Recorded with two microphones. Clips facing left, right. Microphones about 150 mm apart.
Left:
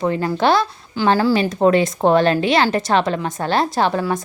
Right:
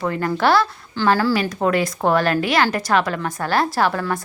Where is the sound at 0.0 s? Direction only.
20° left (ahead or behind).